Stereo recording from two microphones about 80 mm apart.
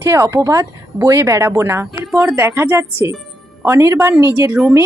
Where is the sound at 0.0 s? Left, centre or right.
Right.